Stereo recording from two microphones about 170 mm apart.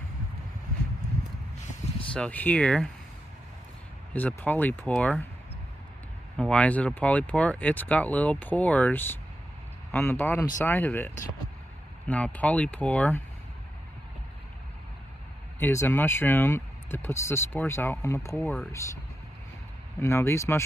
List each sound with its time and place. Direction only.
2.1 s speech: 10° left (ahead or behind)
4.1 s speech: 10° left (ahead or behind)
6.3 s speech: 5° left (ahead or behind)
12.1 s speech: 10° left (ahead or behind)
15.6 s speech: 15° left (ahead or behind)
18.3 s speech: centre (ahead or behind)
20.0 s speech: 15° left (ahead or behind)